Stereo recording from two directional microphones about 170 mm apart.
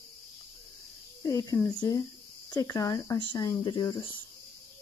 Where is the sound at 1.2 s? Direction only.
20° left (ahead or behind).